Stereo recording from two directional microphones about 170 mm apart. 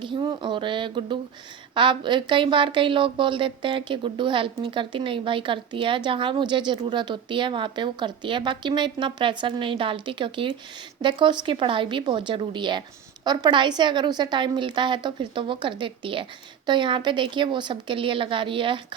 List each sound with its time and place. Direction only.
0.0 s a woman's voice: 30° right (ahead or behind)